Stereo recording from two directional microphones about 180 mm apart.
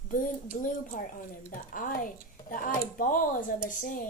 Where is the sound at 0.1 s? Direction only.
45° left (ahead or behind).